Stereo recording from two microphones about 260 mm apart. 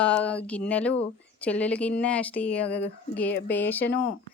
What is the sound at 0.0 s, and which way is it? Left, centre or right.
Speech, centre.